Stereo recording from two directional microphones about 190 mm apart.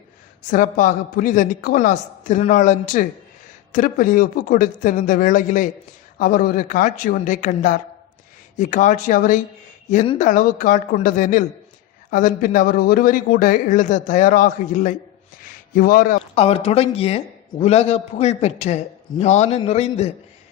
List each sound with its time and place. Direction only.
0.5 s a man's voice: 40° left (ahead or behind)
16.3 s a man's voice: 30° left (ahead or behind)